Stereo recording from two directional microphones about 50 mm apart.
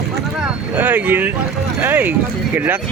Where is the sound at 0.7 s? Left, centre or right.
Right.